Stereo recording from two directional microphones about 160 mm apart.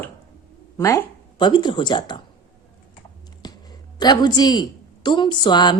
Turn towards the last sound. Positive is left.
turn(degrees=30)  # may be behind; listen again after turning